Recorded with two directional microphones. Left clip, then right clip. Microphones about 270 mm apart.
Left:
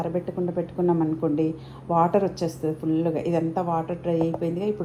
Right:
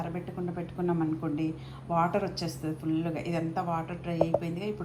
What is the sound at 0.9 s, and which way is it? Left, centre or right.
A woman's voice, right.